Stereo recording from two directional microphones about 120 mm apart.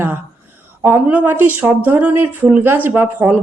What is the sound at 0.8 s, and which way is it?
Speech, 15° right (ahead or behind).